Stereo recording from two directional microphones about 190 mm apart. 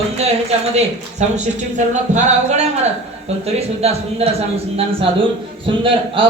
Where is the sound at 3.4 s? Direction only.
35° right (ahead or behind).